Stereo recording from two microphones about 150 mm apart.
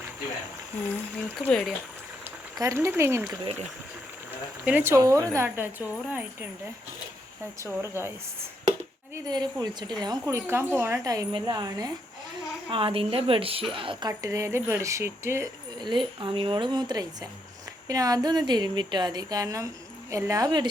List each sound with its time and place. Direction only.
2.6 s a woman's voice: 20° right (ahead or behind)
3.4 s speech: 45° right (ahead or behind)
4.6 s a woman's voice: 10° right (ahead or behind)
7.6 s a woman's voice: 15° right (ahead or behind)
9.1 s speech: 25° right (ahead or behind)
12.7 s a woman's voice: 35° right (ahead or behind)
14.1 s speech: 20° right (ahead or behind)
15.8 s a woman's voice: 30° right (ahead or behind)